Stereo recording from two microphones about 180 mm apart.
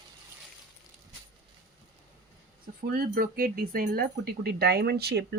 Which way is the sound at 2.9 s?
55° right (ahead or behind).